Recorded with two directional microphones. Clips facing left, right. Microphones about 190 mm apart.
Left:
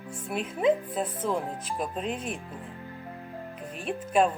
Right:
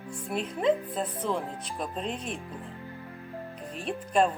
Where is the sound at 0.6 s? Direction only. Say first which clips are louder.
Left 2 dB; centre (ahead or behind).